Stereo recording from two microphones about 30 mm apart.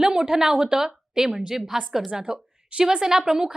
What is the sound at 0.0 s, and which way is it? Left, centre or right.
A woman's voice, right.